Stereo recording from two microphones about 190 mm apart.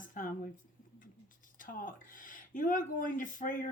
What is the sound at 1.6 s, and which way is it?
Speech, 45° left (ahead or behind).